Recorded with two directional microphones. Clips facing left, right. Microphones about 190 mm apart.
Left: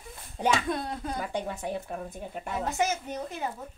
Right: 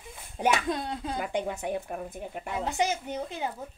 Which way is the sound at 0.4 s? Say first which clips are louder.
Even; 20° right (ahead or behind).